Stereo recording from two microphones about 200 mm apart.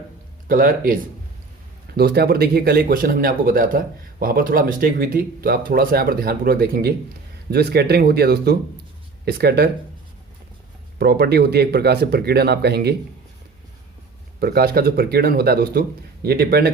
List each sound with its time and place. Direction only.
0.4 s speech: 45° right (ahead or behind)
10.9 s speech: 50° right (ahead or behind)
14.3 s speech: 50° right (ahead or behind)